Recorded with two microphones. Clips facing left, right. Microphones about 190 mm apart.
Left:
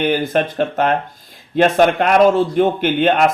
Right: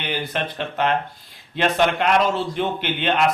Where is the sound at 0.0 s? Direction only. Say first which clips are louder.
Left 10 dB; 45° left (ahead or behind).